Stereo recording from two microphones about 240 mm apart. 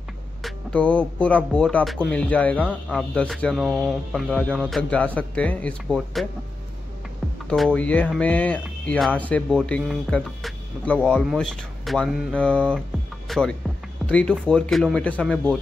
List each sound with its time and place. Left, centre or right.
0.4 s speech: centre
7.4 s speech: centre